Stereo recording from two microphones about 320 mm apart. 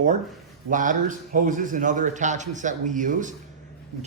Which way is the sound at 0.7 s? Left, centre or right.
Right.